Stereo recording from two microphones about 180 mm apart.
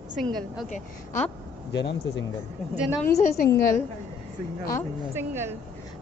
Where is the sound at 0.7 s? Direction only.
45° left (ahead or behind).